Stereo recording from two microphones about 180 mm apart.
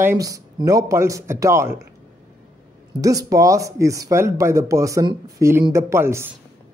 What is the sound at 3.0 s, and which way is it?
Speech, 20° right (ahead or behind).